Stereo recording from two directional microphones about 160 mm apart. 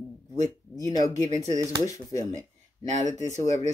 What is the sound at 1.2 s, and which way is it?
Speech, 45° right (ahead or behind).